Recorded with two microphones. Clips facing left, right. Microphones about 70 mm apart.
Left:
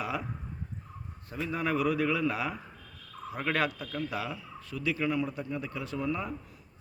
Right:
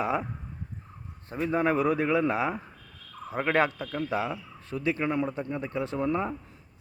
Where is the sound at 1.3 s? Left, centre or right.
Right.